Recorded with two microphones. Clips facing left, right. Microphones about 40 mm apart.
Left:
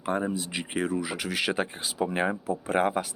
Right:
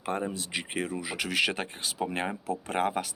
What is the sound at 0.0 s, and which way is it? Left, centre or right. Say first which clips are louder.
Speech: left 3 dB; centre.